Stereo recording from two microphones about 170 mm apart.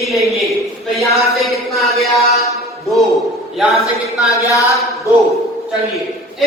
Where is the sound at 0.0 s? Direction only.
Centre (ahead or behind).